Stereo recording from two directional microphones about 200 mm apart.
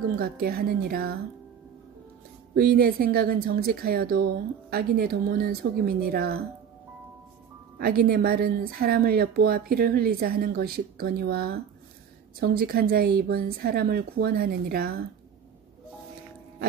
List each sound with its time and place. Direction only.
0.2 s a woman's voice: 50° right (ahead or behind)
2.5 s a woman's voice: 50° right (ahead or behind)
7.8 s a woman's voice: 50° right (ahead or behind)